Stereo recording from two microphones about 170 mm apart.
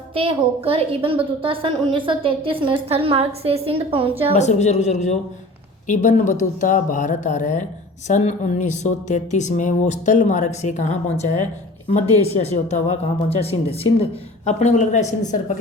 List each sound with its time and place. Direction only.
0.1 s a woman's voice: 35° right (ahead or behind)
4.4 s speech: 40° left (ahead or behind)